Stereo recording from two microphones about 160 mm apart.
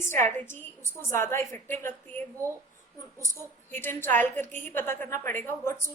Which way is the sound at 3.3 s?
15° left (ahead or behind).